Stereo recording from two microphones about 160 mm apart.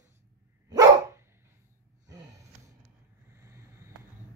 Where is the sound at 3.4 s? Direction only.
15° right (ahead or behind).